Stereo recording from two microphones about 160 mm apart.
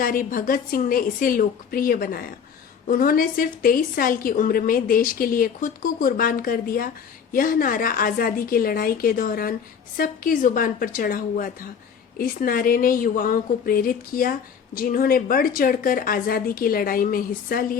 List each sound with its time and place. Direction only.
0.0 s a woman's voice: 60° left (ahead or behind)